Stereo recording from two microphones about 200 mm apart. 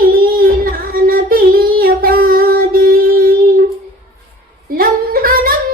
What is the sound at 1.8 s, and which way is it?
Child singing, 45° right (ahead or behind).